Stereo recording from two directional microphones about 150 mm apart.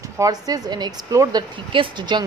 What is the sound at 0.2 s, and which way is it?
A woman's voice, 25° right (ahead or behind).